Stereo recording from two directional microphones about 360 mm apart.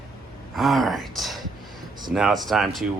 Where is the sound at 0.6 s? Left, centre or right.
Centre.